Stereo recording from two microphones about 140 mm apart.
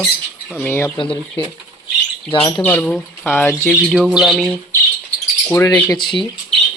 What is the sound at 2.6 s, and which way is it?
Speech, 15° left (ahead or behind).